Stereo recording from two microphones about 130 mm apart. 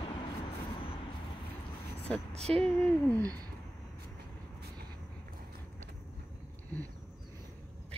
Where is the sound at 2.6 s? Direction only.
5° left (ahead or behind).